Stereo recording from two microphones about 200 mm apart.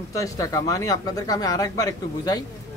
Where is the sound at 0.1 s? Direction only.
15° left (ahead or behind).